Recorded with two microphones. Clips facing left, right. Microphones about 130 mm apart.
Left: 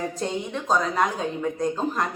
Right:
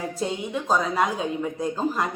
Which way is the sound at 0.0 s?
5° right (ahead or behind).